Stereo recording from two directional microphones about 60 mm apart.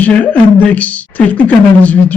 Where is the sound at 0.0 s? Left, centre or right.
Left.